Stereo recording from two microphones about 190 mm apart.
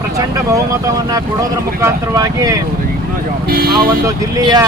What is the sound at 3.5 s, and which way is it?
Speech, 50° right (ahead or behind).